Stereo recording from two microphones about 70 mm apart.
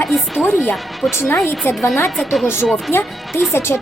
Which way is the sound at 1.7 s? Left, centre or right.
Left.